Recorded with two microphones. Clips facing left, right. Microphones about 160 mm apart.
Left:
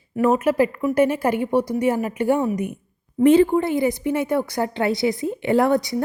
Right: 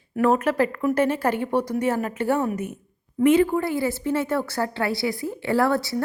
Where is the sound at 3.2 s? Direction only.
30° left (ahead or behind).